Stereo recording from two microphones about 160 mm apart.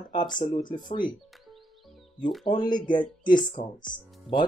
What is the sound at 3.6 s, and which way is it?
Speech, 50° left (ahead or behind).